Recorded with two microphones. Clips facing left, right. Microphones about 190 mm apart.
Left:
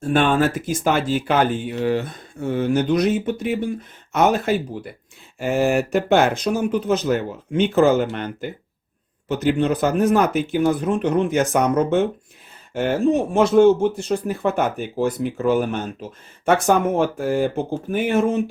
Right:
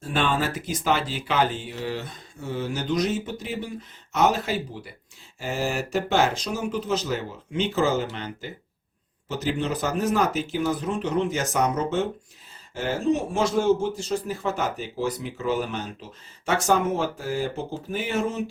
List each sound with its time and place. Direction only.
0.1 s speech: 55° left (ahead or behind)
13.3 s speech: 60° left (ahead or behind)